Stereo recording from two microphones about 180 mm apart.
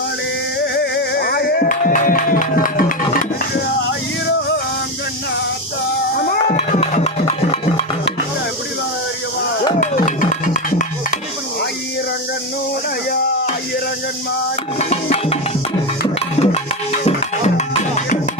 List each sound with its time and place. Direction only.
0.6 s music: 70° left (ahead or behind); by 3.2 s 50° left (ahead or behind)
6.5 s music: 40° left (ahead or behind)
9.8 s music: 40° left (ahead or behind)
14.8 s music: 35° left (ahead or behind)
16.4 s music: 35° left (ahead or behind)